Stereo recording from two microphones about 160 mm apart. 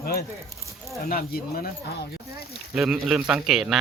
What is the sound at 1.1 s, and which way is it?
Speech, 70° left (ahead or behind).